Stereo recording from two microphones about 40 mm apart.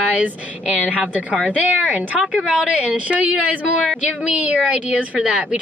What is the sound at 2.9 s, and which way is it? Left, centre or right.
Speech, right.